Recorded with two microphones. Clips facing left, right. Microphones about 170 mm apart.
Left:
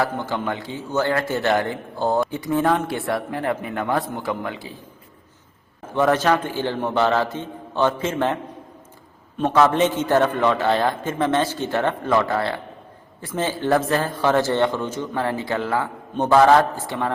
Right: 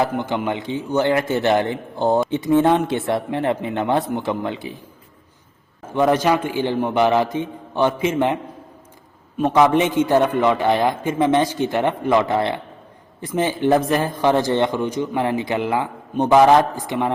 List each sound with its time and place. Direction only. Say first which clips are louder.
0.0 s speech: right 3 dB; 20° right (ahead or behind)
5.9 s a man's voice: right 1 dB; 15° right (ahead or behind)
9.4 s a man's voice: right 2 dB; 15° right (ahead or behind)